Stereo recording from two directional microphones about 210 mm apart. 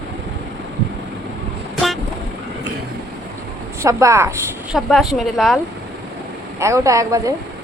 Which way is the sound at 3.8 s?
15° right (ahead or behind).